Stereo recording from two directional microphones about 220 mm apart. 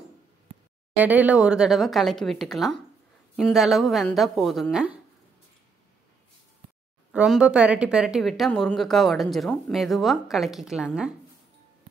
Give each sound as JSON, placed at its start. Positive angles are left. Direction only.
{"t": 0.9, "sound": "speech", "side_deg": -5}
{"t": 7.1, "sound": "speech", "side_deg": -5}